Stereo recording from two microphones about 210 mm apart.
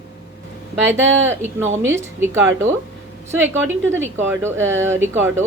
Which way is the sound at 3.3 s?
10° right (ahead or behind).